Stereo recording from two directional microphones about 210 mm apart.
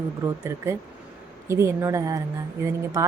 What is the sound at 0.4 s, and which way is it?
A woman's voice, 15° right (ahead or behind).